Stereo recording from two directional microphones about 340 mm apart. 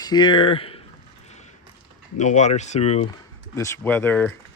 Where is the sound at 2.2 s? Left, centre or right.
Left.